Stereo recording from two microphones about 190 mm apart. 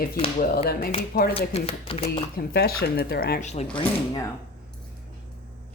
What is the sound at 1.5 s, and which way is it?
Speech, 30° left (ahead or behind).